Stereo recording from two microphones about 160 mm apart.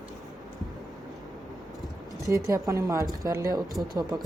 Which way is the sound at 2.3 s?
20° right (ahead or behind).